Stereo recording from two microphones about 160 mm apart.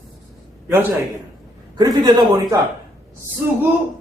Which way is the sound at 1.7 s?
25° right (ahead or behind).